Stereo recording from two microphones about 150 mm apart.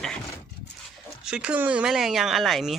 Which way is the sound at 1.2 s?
5° right (ahead or behind).